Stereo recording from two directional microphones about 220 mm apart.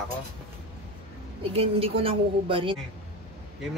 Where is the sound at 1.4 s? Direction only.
25° right (ahead or behind).